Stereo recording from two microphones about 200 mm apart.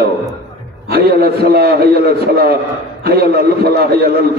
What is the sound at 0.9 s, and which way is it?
A man's voice, 50° right (ahead or behind).